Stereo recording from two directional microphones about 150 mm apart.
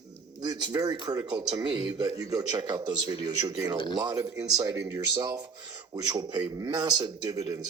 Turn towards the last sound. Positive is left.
turn(degrees=-25)  # may be behind; listen again after turning